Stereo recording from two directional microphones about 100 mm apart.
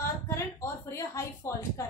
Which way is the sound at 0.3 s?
30° left (ahead or behind).